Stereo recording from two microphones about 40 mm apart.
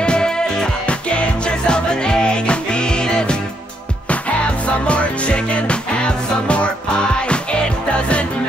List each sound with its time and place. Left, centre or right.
0.0 s music: left
4.6 s music: left